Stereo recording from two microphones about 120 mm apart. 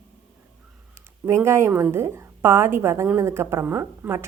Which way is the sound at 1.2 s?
20° right (ahead or behind).